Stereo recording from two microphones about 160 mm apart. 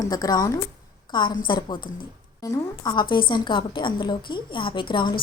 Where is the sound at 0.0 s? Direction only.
25° left (ahead or behind).